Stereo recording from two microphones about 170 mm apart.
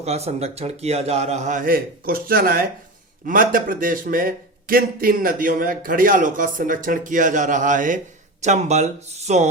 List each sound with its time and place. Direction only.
0.0 s a man's voice: 40° right (ahead or behind)